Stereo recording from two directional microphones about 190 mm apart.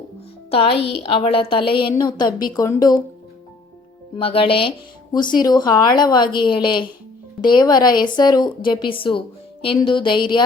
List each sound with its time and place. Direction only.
0.5 s a woman's voice: 30° left (ahead or behind)
4.2 s a woman's voice: 30° left (ahead or behind)